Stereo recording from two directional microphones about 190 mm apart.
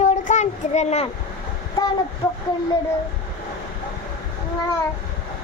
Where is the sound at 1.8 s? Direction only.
20° left (ahead or behind).